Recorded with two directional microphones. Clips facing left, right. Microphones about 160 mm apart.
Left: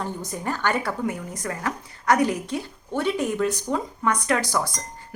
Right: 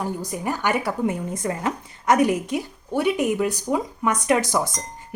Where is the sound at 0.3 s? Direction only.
15° right (ahead or behind).